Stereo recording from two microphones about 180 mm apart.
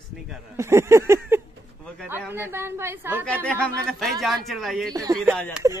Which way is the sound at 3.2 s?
5° left (ahead or behind).